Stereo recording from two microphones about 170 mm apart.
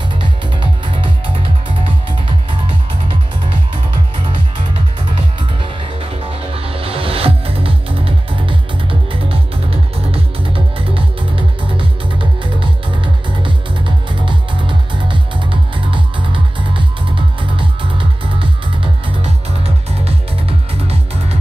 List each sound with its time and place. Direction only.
0.2 s music: 30° right (ahead or behind)
5.6 s music: 35° right (ahead or behind)